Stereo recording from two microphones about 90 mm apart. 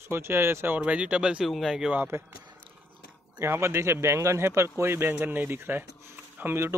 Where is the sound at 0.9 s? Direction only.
15° right (ahead or behind).